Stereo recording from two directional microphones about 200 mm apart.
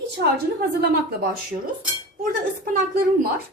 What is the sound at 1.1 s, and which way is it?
Speech, 45° right (ahead or behind).